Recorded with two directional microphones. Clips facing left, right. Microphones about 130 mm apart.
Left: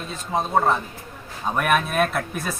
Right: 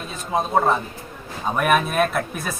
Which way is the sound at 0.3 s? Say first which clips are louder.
Right 1 dB; 5° right (ahead or behind).